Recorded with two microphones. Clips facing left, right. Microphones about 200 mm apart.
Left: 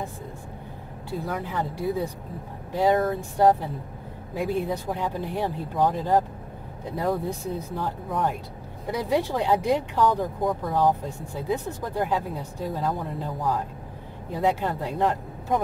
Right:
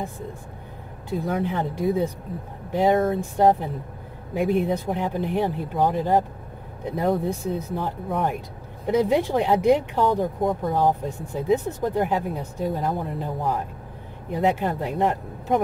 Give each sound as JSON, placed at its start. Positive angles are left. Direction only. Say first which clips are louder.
{"t": 1.2, "sound": "speech", "louder": "right 5 dB", "side_deg": -25}